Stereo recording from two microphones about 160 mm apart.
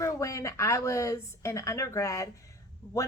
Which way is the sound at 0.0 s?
20° left (ahead or behind).